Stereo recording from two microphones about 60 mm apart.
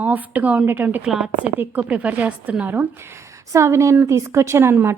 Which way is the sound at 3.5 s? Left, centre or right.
Right.